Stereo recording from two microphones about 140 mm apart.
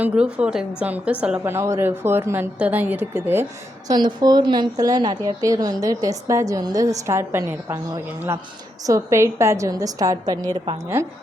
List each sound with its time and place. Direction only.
0.0 s a woman's voice: 10° right (ahead or behind)
3.8 s a woman's voice: 30° right (ahead or behind)